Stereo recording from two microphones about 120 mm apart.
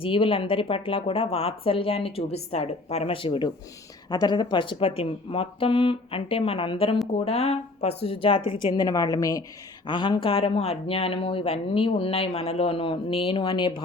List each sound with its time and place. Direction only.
0.0 s speech: 50° left (ahead or behind)
7.1 s speech: 60° left (ahead or behind)
8.7 s a woman's voice: 35° left (ahead or behind)
9.8 s speech: 40° left (ahead or behind)